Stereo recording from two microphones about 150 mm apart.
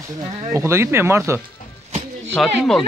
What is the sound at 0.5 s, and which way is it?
Speech, 15° right (ahead or behind).